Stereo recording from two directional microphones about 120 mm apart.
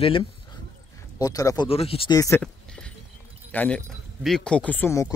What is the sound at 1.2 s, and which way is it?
Speech, 30° left (ahead or behind).